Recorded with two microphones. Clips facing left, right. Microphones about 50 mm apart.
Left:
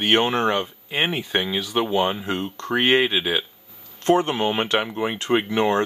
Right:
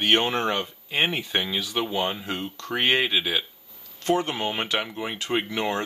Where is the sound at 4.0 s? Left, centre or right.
Left.